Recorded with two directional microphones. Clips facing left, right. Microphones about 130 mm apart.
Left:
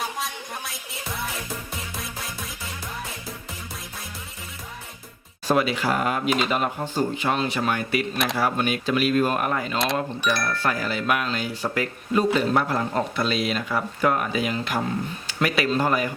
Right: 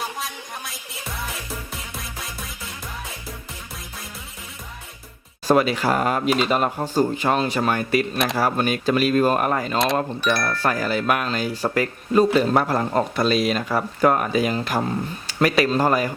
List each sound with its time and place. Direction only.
0.2 s music: centre (ahead or behind)
5.5 s speech: 40° right (ahead or behind)
9.7 s speech: centre (ahead or behind)
10.6 s speech: 40° right (ahead or behind)